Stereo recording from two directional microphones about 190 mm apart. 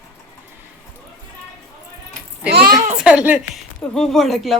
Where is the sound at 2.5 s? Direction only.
55° right (ahead or behind).